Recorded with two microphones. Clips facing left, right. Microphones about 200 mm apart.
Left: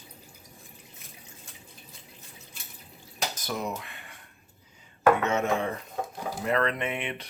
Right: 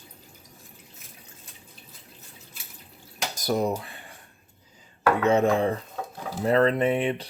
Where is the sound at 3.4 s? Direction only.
40° right (ahead or behind).